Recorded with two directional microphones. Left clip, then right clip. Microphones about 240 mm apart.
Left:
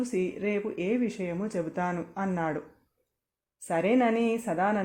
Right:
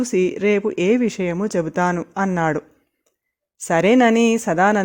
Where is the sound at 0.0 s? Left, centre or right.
Right.